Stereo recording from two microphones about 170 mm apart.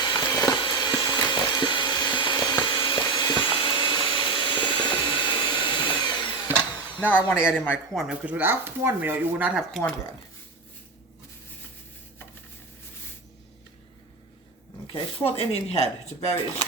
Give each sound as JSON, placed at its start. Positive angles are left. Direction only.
{"t": 0.0, "sound": "vacuum cleaner", "side_deg": 25}
{"t": 7.0, "sound": "speech", "side_deg": 10}
{"t": 7.3, "sound": "speech", "side_deg": -5}
{"t": 9.6, "sound": "speech", "side_deg": 0}
{"t": 14.9, "sound": "speech", "side_deg": 35}